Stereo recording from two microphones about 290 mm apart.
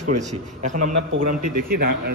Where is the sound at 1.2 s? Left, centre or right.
Right.